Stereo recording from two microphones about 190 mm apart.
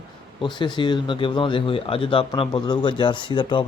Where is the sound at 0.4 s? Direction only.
25° left (ahead or behind).